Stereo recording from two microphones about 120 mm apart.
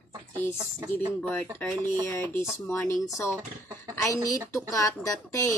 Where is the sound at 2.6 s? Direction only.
20° left (ahead or behind).